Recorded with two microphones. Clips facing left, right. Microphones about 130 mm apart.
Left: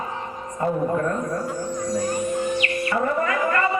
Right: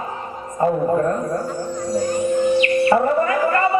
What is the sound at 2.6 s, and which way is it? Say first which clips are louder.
Music: right 8 dB; 30° right (ahead or behind).